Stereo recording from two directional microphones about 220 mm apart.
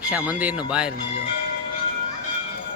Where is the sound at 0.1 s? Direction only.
5° right (ahead or behind).